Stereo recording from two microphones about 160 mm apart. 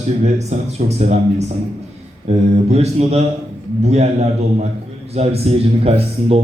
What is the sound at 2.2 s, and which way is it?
A man's voice, 40° right (ahead or behind).